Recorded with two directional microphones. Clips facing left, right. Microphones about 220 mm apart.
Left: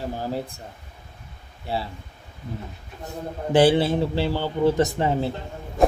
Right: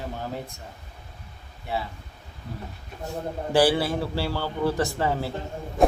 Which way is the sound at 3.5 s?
25° left (ahead or behind).